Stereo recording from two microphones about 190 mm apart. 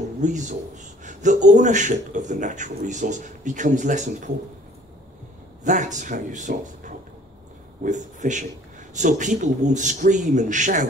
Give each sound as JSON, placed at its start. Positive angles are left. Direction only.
{"t": 0.2, "sound": "speech", "side_deg": -40}
{"t": 5.6, "sound": "a man's voice", "side_deg": -40}